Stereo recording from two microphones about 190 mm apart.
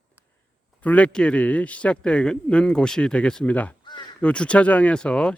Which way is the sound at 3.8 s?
25° left (ahead or behind).